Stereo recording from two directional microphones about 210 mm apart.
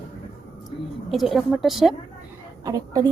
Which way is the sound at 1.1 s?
Centre (ahead or behind).